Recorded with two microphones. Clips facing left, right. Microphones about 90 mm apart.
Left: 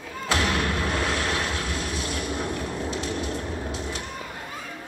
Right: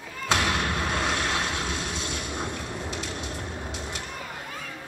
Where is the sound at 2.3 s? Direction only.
20° right (ahead or behind).